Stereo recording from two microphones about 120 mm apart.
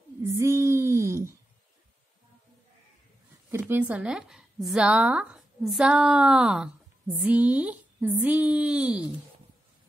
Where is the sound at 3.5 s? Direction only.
20° right (ahead or behind).